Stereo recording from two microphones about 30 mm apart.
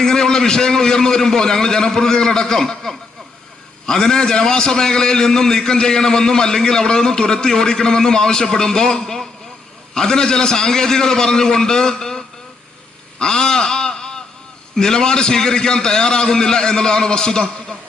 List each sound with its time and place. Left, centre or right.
0.0 s a man's voice: centre
13.1 s a sound: left
14.8 s a man's voice: left